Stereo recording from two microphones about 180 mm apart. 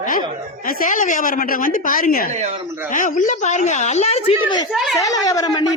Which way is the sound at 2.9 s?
45° left (ahead or behind).